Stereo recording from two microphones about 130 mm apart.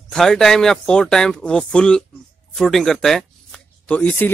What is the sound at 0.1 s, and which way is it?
Speech, 5° left (ahead or behind).